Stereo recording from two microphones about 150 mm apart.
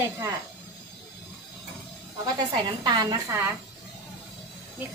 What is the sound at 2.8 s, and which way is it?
Speech, 30° right (ahead or behind).